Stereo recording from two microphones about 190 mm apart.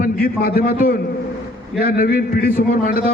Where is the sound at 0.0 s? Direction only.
50° left (ahead or behind).